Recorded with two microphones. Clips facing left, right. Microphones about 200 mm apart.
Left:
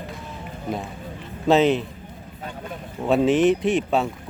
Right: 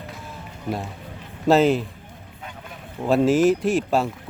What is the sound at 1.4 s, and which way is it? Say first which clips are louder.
Speech: right 1 dB; 5° right (ahead or behind).